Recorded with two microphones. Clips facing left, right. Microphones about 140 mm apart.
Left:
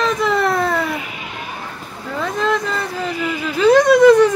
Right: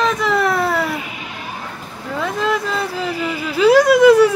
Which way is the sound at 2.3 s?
5° right (ahead or behind).